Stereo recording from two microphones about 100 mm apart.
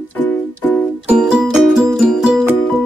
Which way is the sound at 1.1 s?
10° right (ahead or behind).